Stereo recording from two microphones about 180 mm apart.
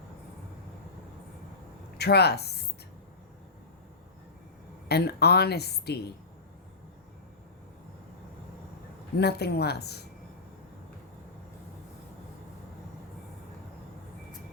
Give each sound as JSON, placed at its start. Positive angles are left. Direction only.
{"t": 2.0, "sound": "a woman's voice", "side_deg": 65}
{"t": 4.9, "sound": "a woman's voice", "side_deg": 65}
{"t": 9.1, "sound": "a woman's voice", "side_deg": 65}